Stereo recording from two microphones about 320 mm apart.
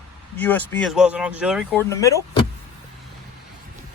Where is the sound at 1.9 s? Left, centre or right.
Centre.